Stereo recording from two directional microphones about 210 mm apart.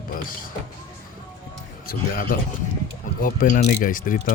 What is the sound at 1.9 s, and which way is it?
Speech, 45° left (ahead or behind).